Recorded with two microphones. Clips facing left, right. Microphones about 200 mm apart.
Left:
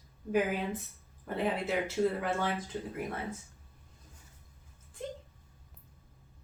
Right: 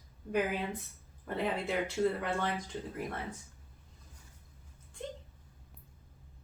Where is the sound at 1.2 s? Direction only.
Centre (ahead or behind).